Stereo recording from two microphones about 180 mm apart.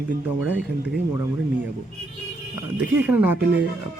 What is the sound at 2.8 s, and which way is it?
Speech, 10° right (ahead or behind).